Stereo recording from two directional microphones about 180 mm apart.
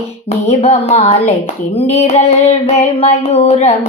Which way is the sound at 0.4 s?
35° left (ahead or behind).